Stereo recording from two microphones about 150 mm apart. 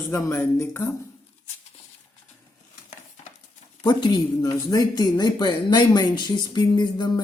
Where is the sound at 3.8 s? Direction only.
30° left (ahead or behind).